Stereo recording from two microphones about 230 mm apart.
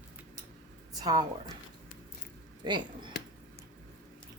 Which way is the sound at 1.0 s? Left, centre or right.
Centre.